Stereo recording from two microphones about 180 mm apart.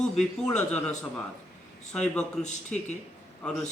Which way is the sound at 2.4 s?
40° left (ahead or behind).